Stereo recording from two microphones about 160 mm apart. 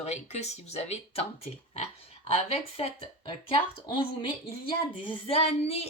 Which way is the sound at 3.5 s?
35° left (ahead or behind).